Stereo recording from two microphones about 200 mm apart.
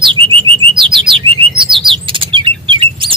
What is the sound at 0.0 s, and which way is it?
Bird, 25° right (ahead or behind).